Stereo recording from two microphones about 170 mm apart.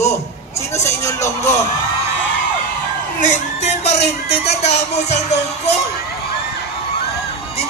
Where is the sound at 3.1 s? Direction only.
50° left (ahead or behind).